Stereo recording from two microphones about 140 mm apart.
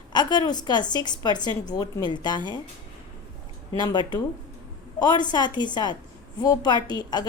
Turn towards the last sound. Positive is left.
turn(degrees=30)  # may be behind; listen again after turning